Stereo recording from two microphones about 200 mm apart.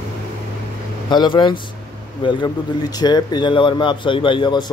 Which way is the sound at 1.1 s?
25° left (ahead or behind).